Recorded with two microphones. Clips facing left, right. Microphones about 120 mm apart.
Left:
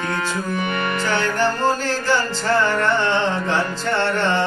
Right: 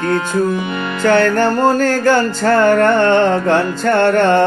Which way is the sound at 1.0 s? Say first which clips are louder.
Right 10 dB; 55° right (ahead or behind).